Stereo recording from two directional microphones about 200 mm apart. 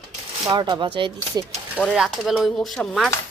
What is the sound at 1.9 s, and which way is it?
Speech, centre (ahead or behind).